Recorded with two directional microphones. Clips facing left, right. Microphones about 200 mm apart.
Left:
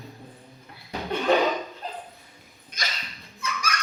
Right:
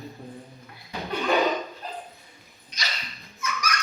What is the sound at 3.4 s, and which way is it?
Dog, 30° left (ahead or behind).